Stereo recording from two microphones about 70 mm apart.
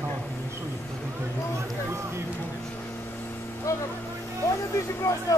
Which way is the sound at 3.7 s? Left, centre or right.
Left.